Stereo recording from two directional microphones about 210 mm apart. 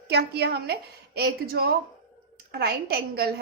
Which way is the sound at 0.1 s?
50° right (ahead or behind).